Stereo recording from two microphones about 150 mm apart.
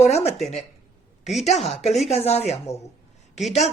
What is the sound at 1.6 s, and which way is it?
Speech, 45° left (ahead or behind).